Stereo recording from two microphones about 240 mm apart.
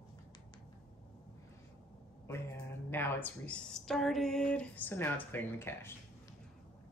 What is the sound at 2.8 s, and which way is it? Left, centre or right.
Speech, centre.